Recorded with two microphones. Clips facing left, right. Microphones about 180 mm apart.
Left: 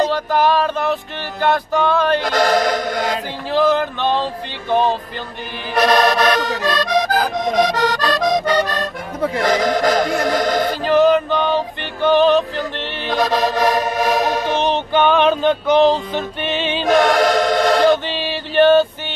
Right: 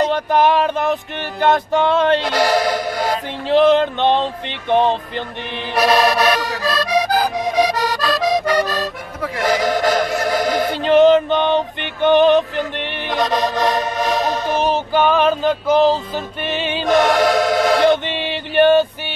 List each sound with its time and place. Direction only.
0.1 s music: 20° right (ahead or behind)
2.6 s music: 10° right (ahead or behind)
3.4 s music: 25° right (ahead or behind)
5.8 s accordion: 5° right (ahead or behind)
9.4 s music: 5° right (ahead or behind)
10.7 s music: 25° right (ahead or behind)
13.2 s music: 5° left (ahead or behind)
14.5 s music: 5° right (ahead or behind)
17.8 s a sound: 20° right (ahead or behind)